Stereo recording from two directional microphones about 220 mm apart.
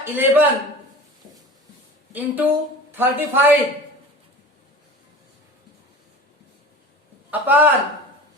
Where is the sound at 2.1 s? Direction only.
10° right (ahead or behind).